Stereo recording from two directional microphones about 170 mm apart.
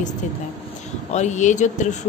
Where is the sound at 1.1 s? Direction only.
45° left (ahead or behind).